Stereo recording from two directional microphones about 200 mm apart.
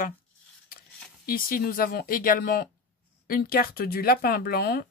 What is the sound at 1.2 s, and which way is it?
Speech, 45° left (ahead or behind).